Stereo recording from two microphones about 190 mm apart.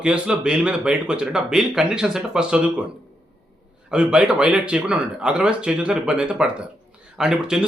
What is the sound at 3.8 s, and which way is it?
Speech, 5° right (ahead or behind).